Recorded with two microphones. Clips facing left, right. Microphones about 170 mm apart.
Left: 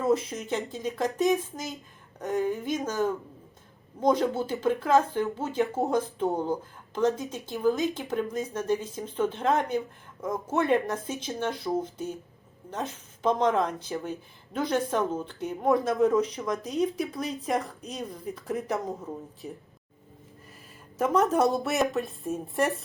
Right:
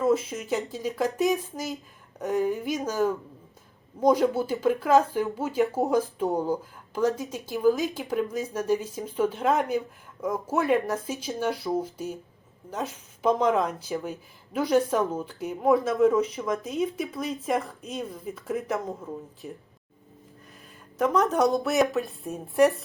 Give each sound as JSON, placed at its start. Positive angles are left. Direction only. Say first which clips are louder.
{"t": 0.0, "sound": "speech", "louder": "right 2 dB", "side_deg": 0}
{"t": 2.1, "sound": "a sound", "louder": "right 2 dB", "side_deg": -5}
{"t": 2.5, "sound": "speech", "louder": "right 1 dB", "side_deg": -5}
{"t": 4.4, "sound": "speech", "louder": "right 2 dB", "side_deg": -5}
{"t": 21.0, "sound": "speech", "louder": "right 1 dB", "side_deg": 0}